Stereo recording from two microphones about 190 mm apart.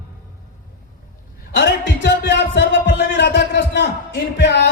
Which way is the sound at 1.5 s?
65° left (ahead or behind).